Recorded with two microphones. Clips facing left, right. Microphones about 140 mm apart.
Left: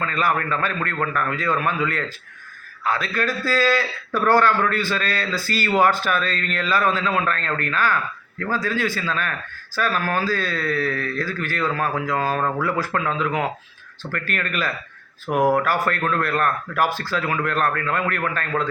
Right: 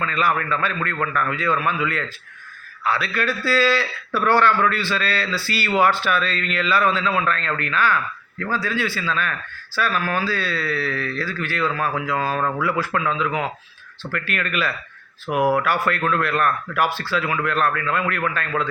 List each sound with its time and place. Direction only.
0.0 s a man's voice: 40° left (ahead or behind)
15.3 s speech: 5° right (ahead or behind)
15.5 s a man's voice: 40° left (ahead or behind)